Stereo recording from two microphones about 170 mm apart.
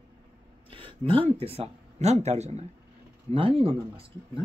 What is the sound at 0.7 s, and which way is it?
Speech, 30° right (ahead or behind).